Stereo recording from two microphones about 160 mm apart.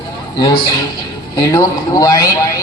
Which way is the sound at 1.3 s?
25° left (ahead or behind).